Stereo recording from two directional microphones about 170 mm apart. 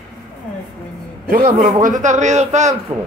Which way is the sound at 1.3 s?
45° right (ahead or behind).